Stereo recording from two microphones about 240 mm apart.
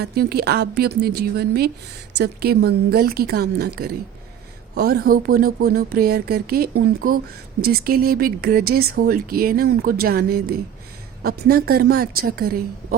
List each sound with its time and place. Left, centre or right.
0.0 s speech: right
4.7 s speech: right